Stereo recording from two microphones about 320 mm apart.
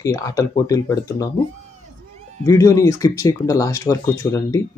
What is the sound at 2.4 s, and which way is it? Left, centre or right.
Speech, centre.